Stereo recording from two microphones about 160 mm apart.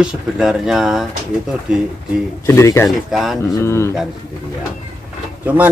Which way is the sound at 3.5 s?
15° left (ahead or behind).